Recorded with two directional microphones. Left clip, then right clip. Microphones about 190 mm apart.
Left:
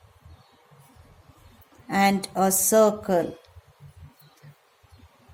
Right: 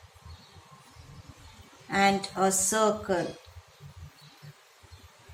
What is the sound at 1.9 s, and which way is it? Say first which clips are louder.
Speech: left 2 dB; 50° left (ahead or behind).